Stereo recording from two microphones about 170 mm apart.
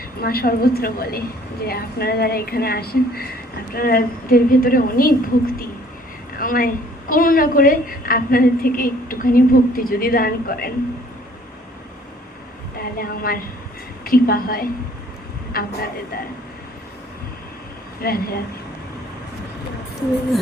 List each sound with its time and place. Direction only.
0.2 s a woman's voice: 65° left (ahead or behind)
6.4 s a sound: 55° left (ahead or behind)
7.1 s a woman's voice: 55° left (ahead or behind)
12.7 s a woman's voice: 60° left (ahead or behind)
18.0 s a woman's voice: 60° left (ahead or behind)